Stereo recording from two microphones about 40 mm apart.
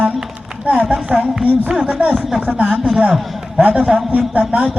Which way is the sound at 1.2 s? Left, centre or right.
Centre.